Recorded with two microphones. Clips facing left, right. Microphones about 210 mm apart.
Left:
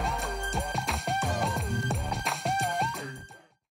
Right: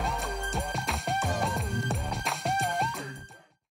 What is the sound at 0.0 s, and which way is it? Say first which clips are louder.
Music: even; centre (ahead or behind).